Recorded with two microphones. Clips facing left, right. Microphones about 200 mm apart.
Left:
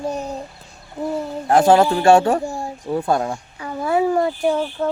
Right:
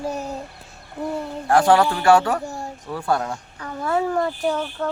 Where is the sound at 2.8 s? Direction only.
25° left (ahead or behind).